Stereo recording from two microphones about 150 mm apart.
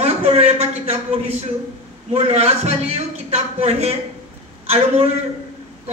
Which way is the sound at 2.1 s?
45° right (ahead or behind).